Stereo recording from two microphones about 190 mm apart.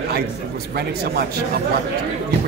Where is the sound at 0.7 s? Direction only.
55° right (ahead or behind).